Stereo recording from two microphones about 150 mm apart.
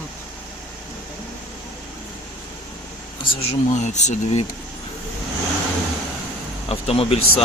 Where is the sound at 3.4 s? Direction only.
45° left (ahead or behind).